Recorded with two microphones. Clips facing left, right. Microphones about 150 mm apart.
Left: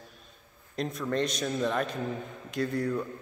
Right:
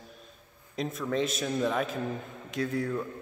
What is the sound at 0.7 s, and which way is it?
A man's voice, centre (ahead or behind).